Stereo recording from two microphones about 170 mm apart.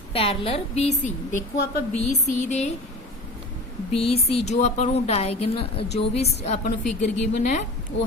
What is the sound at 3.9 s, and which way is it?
Speech, 35° left (ahead or behind).